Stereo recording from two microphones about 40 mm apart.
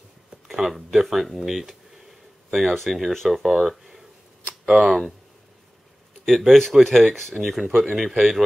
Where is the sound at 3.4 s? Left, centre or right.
Centre.